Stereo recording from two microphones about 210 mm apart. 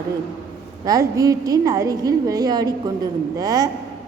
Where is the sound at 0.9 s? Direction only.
15° right (ahead or behind).